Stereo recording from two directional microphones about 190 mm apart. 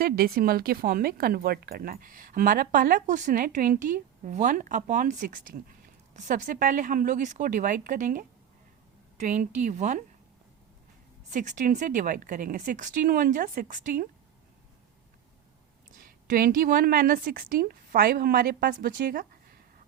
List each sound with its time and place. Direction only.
0.0 s speech: 50° right (ahead or behind)
11.3 s speech: 40° right (ahead or behind)
16.0 s speech: 45° right (ahead or behind)